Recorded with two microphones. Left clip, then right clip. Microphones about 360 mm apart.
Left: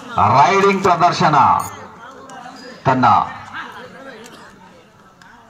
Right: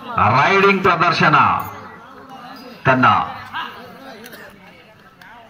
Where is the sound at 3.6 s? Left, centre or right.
Centre.